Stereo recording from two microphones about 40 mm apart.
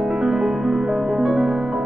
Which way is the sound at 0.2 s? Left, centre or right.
Centre.